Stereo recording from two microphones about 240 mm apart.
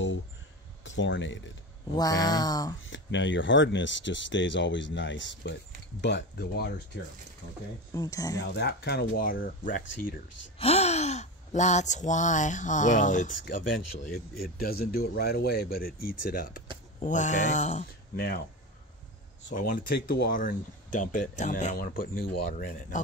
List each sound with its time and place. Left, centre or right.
0.8 s speech: left
2.0 s a sound: centre
2.8 s speech: left
7.9 s a sound: centre
8.5 s speech: left
14.4 s speech: left
16.0 s speech: left
16.3 s speech: left
19.7 s speech: left